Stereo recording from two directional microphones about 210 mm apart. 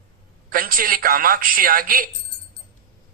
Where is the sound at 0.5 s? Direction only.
45° right (ahead or behind).